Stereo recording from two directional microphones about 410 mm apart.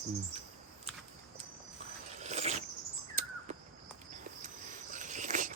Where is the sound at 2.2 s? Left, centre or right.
Centre.